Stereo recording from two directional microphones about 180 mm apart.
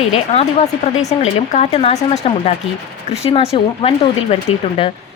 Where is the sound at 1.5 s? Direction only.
35° left (ahead or behind).